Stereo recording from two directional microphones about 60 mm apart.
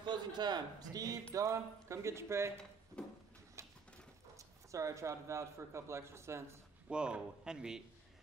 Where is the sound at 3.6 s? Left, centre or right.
Right.